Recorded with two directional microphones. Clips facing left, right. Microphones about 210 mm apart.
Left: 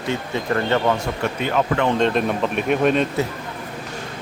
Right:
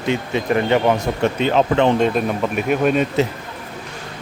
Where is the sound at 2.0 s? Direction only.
5° right (ahead or behind).